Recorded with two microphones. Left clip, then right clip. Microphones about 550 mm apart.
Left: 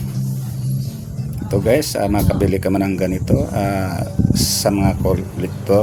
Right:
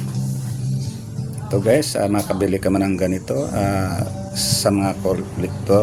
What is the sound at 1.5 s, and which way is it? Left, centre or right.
Speech, left.